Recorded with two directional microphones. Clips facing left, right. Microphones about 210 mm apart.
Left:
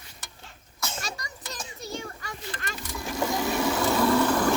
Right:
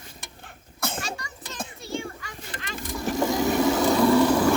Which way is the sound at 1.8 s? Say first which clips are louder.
Right 4 dB; 40° left (ahead or behind).